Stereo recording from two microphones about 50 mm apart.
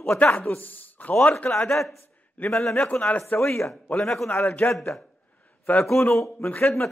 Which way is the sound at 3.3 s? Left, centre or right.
Left.